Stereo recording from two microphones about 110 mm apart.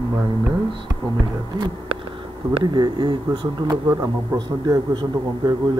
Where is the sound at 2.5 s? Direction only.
45° right (ahead or behind).